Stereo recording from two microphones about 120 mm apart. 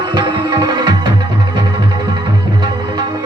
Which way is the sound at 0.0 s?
40° right (ahead or behind).